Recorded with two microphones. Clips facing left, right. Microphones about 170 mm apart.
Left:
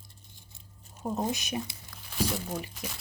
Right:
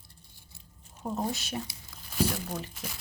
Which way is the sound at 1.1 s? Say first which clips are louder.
Left 1 dB; 20° left (ahead or behind).